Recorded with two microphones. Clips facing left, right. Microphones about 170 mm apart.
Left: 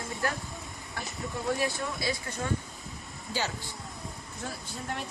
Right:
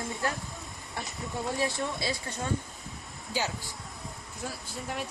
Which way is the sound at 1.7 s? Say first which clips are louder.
Right 1 dB; 25° right (ahead or behind).